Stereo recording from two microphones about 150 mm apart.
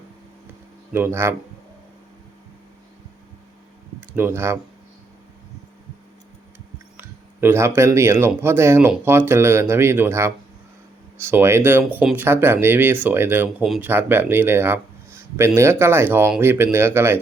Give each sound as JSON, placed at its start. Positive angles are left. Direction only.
{"t": 0.9, "sound": "speech", "side_deg": -15}
{"t": 4.1, "sound": "speech", "side_deg": -15}
{"t": 7.4, "sound": "speech", "side_deg": -15}